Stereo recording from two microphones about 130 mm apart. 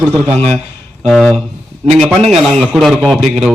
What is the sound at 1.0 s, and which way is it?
A man's voice, centre (ahead or behind).